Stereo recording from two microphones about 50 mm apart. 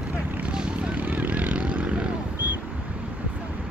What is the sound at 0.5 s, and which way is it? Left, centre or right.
Vehicle, centre.